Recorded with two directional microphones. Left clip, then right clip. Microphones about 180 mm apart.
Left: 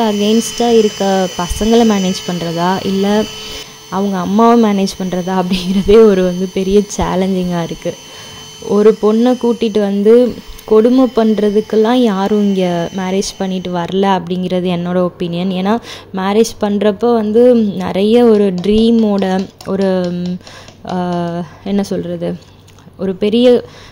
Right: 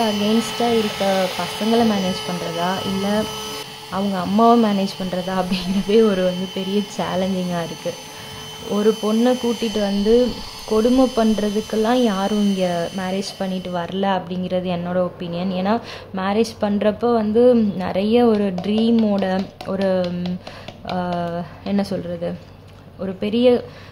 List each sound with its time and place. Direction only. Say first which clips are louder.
0.0 s a woman's voice: left 6 dB; 30° left (ahead or behind)
4.6 s a woman's voice: left 6 dB; 30° left (ahead or behind)
8.7 s a woman's voice: left 10 dB; 30° left (ahead or behind)
9.0 s speech: left 7 dB; 20° left (ahead or behind)
9.8 s a woman's voice: left 8 dB; 30° left (ahead or behind)